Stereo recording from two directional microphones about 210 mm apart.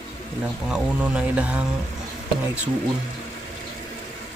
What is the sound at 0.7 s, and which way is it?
Speech, 5° right (ahead or behind).